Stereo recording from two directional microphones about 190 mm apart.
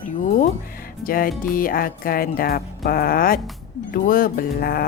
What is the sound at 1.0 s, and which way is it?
Speech, 50° left (ahead or behind).